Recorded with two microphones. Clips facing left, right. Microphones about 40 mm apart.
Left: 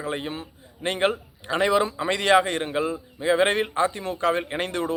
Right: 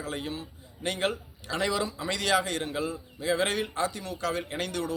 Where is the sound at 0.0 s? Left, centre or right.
Left.